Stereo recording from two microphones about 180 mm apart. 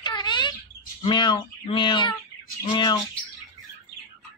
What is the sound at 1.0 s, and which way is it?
Speech, 25° left (ahead or behind).